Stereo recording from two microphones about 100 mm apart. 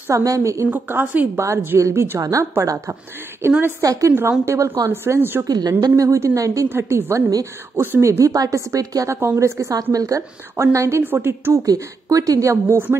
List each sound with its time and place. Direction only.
0.1 s a woman's voice: 35° right (ahead or behind)
0.7 s a woman's voice: 20° right (ahead or behind)
5.4 s a woman's voice: 40° right (ahead or behind)
7.2 s a woman's voice: 40° right (ahead or behind)
7.8 s a woman's voice: 25° right (ahead or behind)
11.6 s a woman's voice: 35° right (ahead or behind)